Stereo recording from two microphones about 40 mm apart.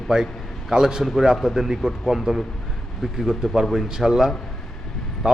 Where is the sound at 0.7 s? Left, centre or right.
Centre.